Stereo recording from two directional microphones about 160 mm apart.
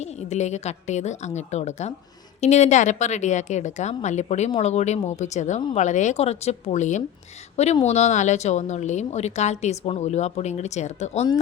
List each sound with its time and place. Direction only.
0.0 s speech: 45° left (ahead or behind)